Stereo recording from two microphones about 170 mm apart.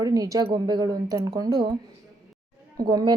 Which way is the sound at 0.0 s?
20° right (ahead or behind).